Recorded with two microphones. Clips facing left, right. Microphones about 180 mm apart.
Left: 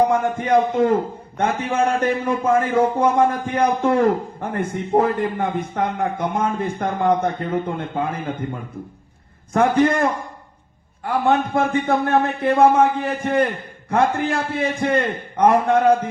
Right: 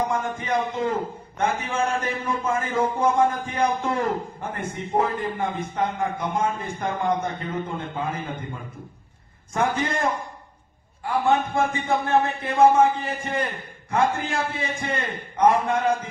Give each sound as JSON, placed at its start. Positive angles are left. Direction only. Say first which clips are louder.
{"t": 0.1, "sound": "a man's voice", "louder": "left 8 dB", "side_deg": 60}
{"t": 9.5, "sound": "a man's voice", "louder": "left 8 dB", "side_deg": 60}